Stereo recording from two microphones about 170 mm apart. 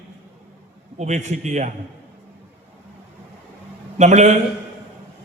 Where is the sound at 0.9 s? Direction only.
40° right (ahead or behind).